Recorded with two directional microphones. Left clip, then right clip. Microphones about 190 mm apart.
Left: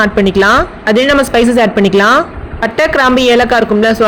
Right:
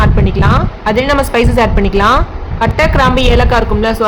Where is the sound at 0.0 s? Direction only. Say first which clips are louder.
Left 5 dB; 25° left (ahead or behind).